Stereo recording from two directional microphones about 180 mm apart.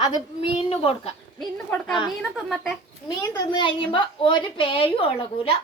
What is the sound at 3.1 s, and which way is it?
A woman's voice, 25° left (ahead or behind).